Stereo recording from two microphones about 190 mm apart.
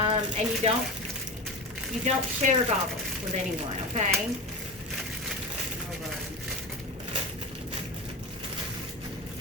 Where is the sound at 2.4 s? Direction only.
40° right (ahead or behind).